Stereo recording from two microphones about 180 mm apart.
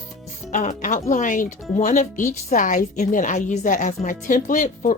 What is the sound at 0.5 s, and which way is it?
A woman's voice, 45° left (ahead or behind).